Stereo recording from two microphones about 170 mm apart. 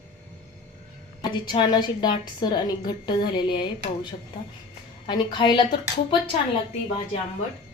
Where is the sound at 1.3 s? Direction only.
25° left (ahead or behind).